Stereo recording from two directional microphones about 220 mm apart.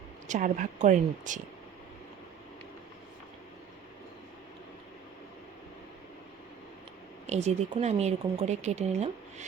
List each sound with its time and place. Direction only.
0.3 s a woman's voice: 35° right (ahead or behind)
7.3 s speech: 30° right (ahead or behind)